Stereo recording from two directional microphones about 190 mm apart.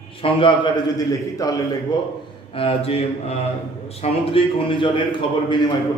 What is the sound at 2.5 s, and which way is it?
Mantra, 30° left (ahead or behind).